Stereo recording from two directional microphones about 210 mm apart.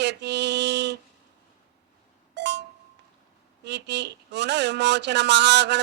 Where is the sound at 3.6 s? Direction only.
55° right (ahead or behind).